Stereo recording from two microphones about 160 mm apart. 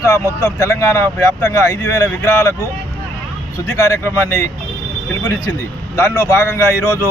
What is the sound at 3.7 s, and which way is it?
Speech, 20° left (ahead or behind).